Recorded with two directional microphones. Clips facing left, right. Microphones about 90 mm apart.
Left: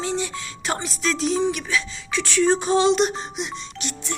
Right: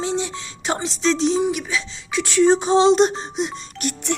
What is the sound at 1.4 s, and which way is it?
Music, 15° right (ahead or behind).